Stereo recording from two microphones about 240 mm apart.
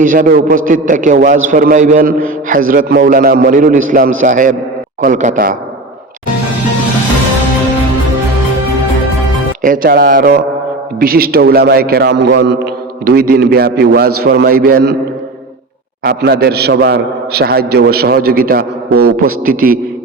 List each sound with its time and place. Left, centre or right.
0.0 s a man's voice: right
9.6 s a man's voice: right
16.0 s a man's voice: right